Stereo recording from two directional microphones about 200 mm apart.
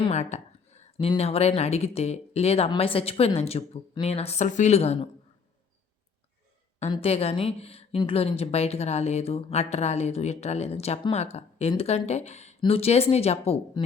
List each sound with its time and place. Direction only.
0.0 s a woman's voice: 35° left (ahead or behind)
6.7 s a woman's voice: 30° left (ahead or behind)